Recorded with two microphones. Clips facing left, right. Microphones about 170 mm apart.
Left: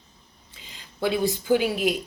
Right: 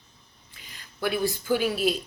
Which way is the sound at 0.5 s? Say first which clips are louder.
Left 2 dB; 25° left (ahead or behind).